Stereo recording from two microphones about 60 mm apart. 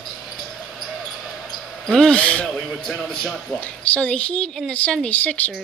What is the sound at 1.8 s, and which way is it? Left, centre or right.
Speech, centre.